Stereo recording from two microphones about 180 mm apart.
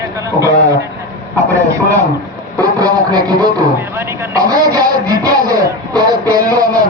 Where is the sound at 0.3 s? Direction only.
15° right (ahead or behind).